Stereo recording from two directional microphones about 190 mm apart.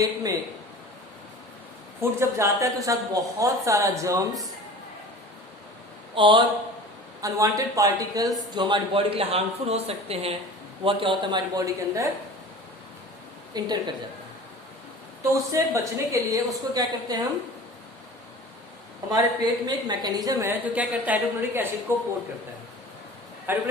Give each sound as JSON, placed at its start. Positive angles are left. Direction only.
{"t": 0.0, "sound": "speech", "side_deg": -20}
{"t": 2.0, "sound": "a woman's voice", "side_deg": -15}
{"t": 6.1, "sound": "speech", "side_deg": -25}
{"t": 13.5, "sound": "speech", "side_deg": -20}
{"t": 15.2, "sound": "a woman's voice", "side_deg": -15}
{"t": 19.6, "sound": "a woman's voice", "side_deg": -20}
{"t": 23.5, "sound": "a woman's voice", "side_deg": -10}